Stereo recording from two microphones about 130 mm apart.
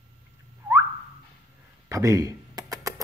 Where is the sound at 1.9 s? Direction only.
25° right (ahead or behind).